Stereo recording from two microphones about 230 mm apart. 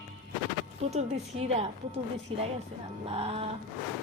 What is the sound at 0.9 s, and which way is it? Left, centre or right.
A woman's voice, right.